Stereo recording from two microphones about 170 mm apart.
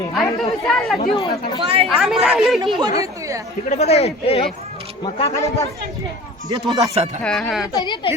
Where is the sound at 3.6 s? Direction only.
40° left (ahead or behind).